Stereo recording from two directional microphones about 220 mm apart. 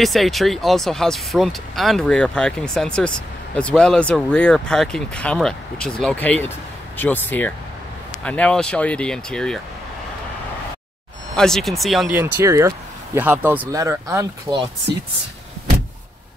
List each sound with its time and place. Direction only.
0.0 s speech: centre (ahead or behind)
11.3 s speech: centre (ahead or behind); by 14.7 s 20° right (ahead or behind)